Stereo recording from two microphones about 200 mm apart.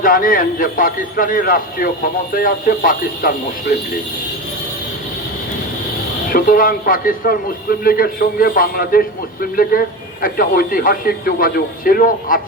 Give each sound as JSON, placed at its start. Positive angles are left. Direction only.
{"t": 0.0, "sound": "a man's voice", "side_deg": 45}
{"t": 6.3, "sound": "a man's voice", "side_deg": 45}